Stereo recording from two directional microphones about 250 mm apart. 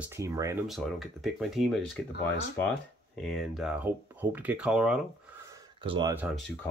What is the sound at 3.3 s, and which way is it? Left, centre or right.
Speech, centre.